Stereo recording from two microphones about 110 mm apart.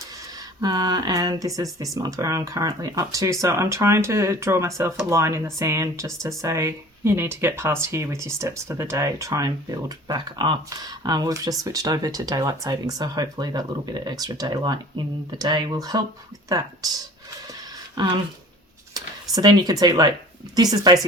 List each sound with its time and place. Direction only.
0.6 s speech: 40° right (ahead or behind)
18.0 s speech: 45° right (ahead or behind)
18.9 s a sound: 35° right (ahead or behind)
19.8 s speech: 40° right (ahead or behind)